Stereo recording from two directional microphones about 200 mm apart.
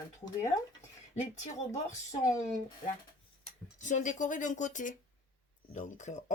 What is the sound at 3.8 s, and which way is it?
Speech, 40° left (ahead or behind).